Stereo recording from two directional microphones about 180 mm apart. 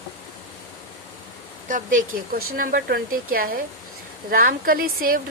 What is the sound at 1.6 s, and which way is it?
A woman's voice, 45° right (ahead or behind).